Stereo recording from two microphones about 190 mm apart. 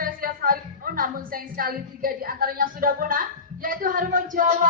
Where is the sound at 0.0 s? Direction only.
50° right (ahead or behind).